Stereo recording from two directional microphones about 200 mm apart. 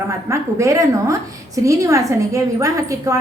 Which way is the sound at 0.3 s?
15° right (ahead or behind).